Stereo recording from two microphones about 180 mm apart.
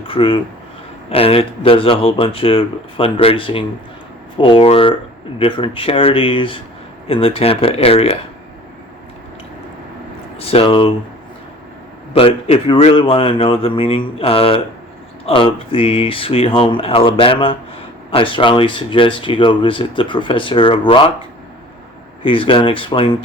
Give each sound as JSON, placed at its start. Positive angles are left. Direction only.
{"t": 0.1, "sound": "speech", "side_deg": 30}
{"t": 10.3, "sound": "speech", "side_deg": 30}
{"t": 12.1, "sound": "speech", "side_deg": 30}